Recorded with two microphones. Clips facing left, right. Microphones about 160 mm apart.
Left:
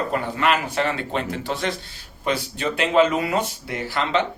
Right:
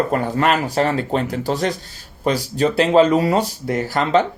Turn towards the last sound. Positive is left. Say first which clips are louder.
# right 6 dB
turn(degrees=-40)  # may be behind; listen again after turning